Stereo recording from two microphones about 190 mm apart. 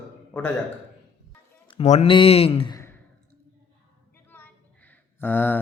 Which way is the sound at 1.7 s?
35° left (ahead or behind).